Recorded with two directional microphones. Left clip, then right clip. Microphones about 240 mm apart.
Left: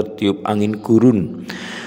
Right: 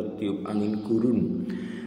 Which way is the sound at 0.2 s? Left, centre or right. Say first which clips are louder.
Left 11 dB; left.